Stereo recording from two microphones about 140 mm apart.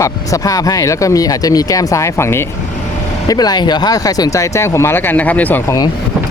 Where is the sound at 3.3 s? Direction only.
30° left (ahead or behind); by 5.6 s 10° left (ahead or behind).